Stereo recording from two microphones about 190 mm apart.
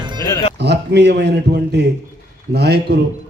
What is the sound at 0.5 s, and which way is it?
A man's voice, 65° right (ahead or behind).